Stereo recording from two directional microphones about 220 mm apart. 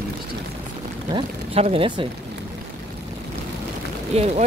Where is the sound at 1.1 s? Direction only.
25° right (ahead or behind).